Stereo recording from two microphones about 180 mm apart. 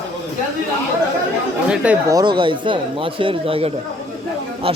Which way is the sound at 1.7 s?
5° right (ahead or behind).